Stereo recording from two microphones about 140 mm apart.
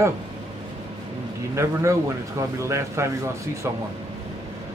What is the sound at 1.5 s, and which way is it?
Speech, 20° right (ahead or behind).